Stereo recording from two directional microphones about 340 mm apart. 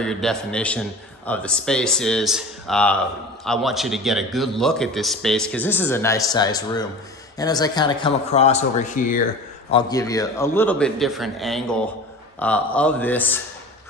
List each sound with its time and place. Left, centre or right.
0.0 s a man's voice: centre